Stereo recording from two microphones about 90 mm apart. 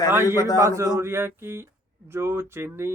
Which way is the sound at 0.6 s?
35° right (ahead or behind).